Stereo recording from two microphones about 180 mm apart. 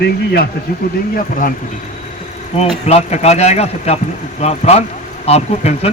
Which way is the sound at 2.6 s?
35° left (ahead or behind).